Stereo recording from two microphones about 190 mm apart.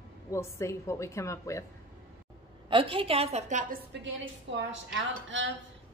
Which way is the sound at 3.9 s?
70° right (ahead or behind).